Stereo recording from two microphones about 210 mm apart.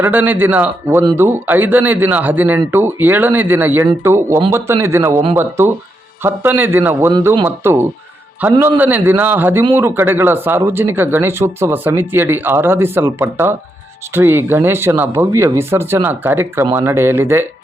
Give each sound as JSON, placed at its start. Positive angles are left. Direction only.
{"t": 0.0, "sound": "a man's voice", "side_deg": -10}
{"t": 7.1, "sound": "a man's voice", "side_deg": -20}
{"t": 7.4, "sound": "a man's voice", "side_deg": -10}